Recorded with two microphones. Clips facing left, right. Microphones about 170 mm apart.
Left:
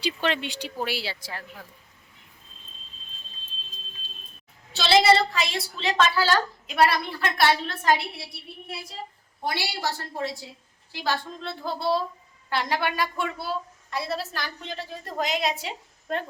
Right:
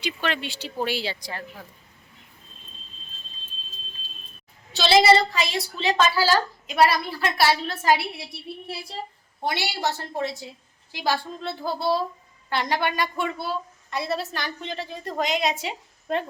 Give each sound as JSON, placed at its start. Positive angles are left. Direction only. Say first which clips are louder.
{"t": 0.0, "sound": "speech", "louder": "left 1 dB", "side_deg": 25}
{"t": 0.9, "sound": "a woman's voice", "louder": "right 3 dB", "side_deg": 5}
{"t": 4.7, "sound": "a woman's voice", "louder": "right 2 dB", "side_deg": 0}
{"t": 8.6, "sound": "a woman's voice", "louder": "even", "side_deg": -30}
{"t": 10.9, "sound": "a woman's voice", "louder": "right 3 dB", "side_deg": -10}